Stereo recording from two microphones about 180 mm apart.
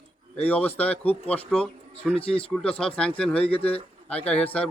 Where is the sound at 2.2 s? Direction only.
30° left (ahead or behind).